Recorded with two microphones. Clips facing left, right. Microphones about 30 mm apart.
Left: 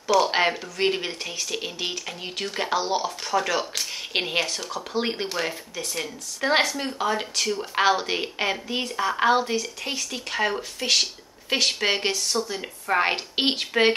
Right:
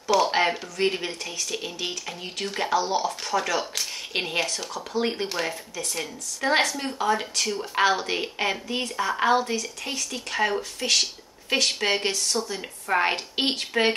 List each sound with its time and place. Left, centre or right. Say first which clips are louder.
0.3 s speech: even; centre
2.7 s speech: right 1 dB; centre
3.1 s speech: left 1 dB; centre